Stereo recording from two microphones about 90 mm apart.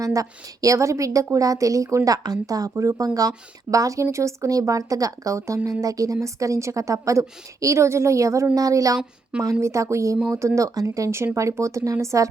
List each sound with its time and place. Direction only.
0.0 s speech: 40° right (ahead or behind)